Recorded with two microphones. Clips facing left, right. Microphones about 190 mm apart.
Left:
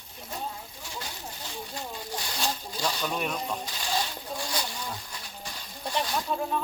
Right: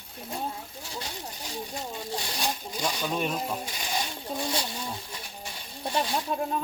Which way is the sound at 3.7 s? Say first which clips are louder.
Left 1 dB; 15° right (ahead or behind).